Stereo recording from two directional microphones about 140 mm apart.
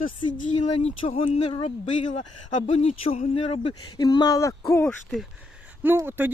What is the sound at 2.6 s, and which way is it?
Speech, 45° left (ahead or behind).